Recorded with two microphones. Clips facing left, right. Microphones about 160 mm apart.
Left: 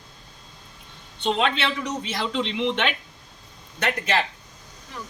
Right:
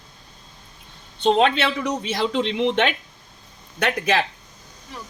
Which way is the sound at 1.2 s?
40° right (ahead or behind).